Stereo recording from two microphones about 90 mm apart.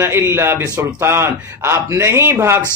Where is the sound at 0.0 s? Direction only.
25° right (ahead or behind).